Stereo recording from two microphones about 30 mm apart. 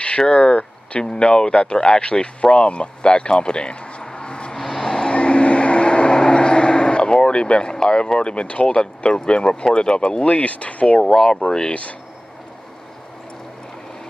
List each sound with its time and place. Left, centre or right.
0.3 s speech: left
4.6 s vehicle: centre
5.1 s vehicle: left
8.2 s speech: left
8.7 s speech: left
11.1 s speech: left